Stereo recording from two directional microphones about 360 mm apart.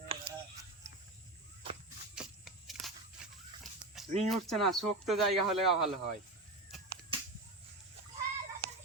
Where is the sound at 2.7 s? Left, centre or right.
Centre.